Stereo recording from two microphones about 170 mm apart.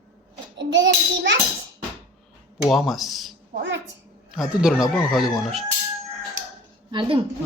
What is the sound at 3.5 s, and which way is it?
Speech, 90° right.